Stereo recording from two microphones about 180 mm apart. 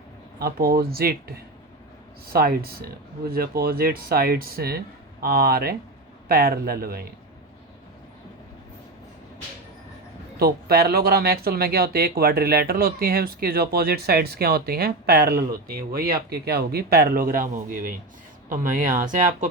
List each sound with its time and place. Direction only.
0.3 s speech: 55° right (ahead or behind)
2.3 s speech: 55° right (ahead or behind)
10.3 s speech: 60° right (ahead or behind)